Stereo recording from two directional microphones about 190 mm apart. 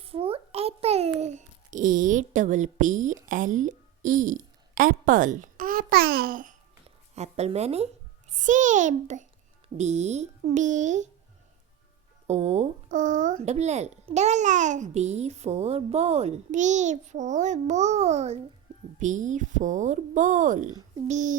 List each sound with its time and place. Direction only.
0.0 s a sound: 30° right (ahead or behind); by 6.6 s 45° right (ahead or behind)
6.8 s a child's voice: 35° right (ahead or behind)
12.3 s a child's voice: 35° right (ahead or behind)